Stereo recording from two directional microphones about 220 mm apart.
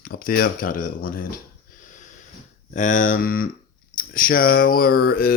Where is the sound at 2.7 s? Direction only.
35° left (ahead or behind).